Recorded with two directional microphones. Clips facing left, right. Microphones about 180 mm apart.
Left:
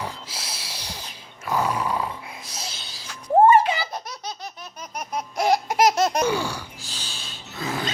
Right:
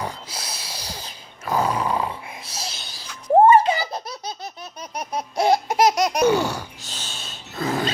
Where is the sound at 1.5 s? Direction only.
30° right (ahead or behind).